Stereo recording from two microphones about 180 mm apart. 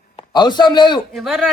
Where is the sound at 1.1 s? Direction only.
Centre (ahead or behind).